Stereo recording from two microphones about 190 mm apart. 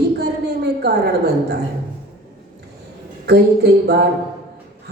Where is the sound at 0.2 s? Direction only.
60° right (ahead or behind).